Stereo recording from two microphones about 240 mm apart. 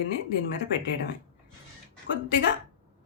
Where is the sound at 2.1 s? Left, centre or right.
Left.